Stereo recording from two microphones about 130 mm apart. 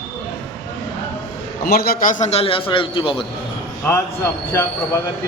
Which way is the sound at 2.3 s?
50° left (ahead or behind).